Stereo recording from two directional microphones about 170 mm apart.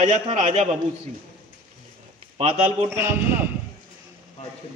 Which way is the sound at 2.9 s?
15° right (ahead or behind).